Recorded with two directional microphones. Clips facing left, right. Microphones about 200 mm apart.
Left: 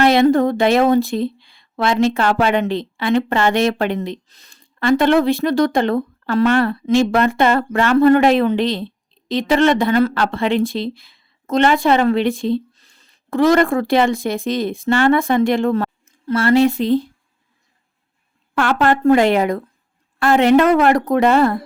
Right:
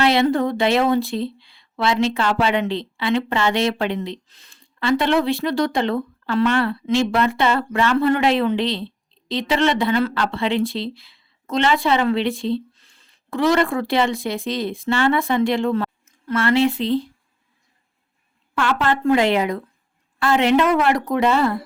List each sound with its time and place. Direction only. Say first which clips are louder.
0.0 s speech: left 5 dB; 45° left (ahead or behind)
18.5 s speech: left 4 dB; 50° left (ahead or behind)